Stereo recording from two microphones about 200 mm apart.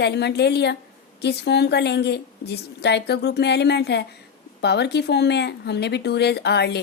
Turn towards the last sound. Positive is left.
turn(degrees=55)  # may be behind; listen again after turning